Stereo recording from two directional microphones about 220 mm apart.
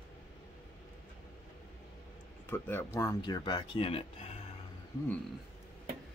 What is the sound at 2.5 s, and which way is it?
Speech, 10° left (ahead or behind).